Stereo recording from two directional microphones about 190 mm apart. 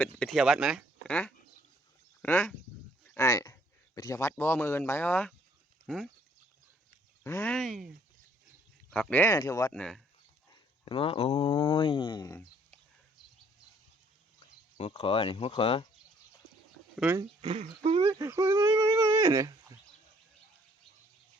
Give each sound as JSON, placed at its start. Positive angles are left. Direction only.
{"t": 0.0, "sound": "a sound", "side_deg": 5}
{"t": 2.2, "sound": "speech", "side_deg": 10}
{"t": 7.3, "sound": "speech", "side_deg": 10}
{"t": 8.9, "sound": "speech", "side_deg": 10}
{"t": 9.7, "sound": "speech", "side_deg": 5}
{"t": 10.5, "sound": "speech", "side_deg": 30}
{"t": 14.8, "sound": "speech", "side_deg": 30}
{"t": 16.9, "sound": "speech", "side_deg": -5}
{"t": 17.2, "sound": "speech", "side_deg": -30}
{"t": 18.1, "sound": "speech", "side_deg": -15}